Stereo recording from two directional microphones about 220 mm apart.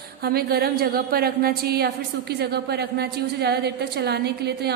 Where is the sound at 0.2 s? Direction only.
45° right (ahead or behind).